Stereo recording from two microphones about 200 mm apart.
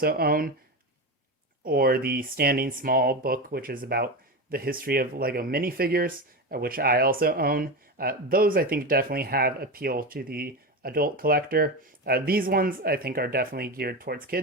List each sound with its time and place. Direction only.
0.0 s speech: 50° right (ahead or behind)
1.6 s speech: 50° right (ahead or behind)